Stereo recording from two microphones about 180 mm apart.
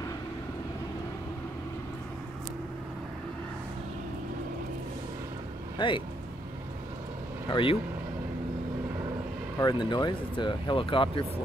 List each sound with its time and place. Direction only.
5.8 s speech: 25° left (ahead or behind)
7.4 s speech: 25° left (ahead or behind)
9.6 s speech: 25° left (ahead or behind)